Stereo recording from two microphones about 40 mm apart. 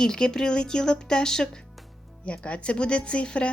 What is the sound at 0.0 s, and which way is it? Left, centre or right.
Speech, centre.